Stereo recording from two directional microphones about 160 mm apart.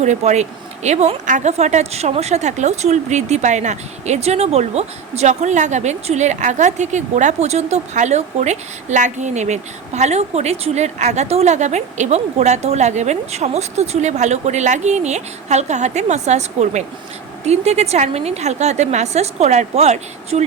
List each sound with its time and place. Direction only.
0.0 s speech: 45° right (ahead or behind)